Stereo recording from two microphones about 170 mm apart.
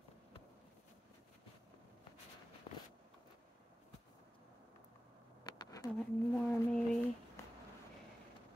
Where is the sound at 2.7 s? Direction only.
30° left (ahead or behind).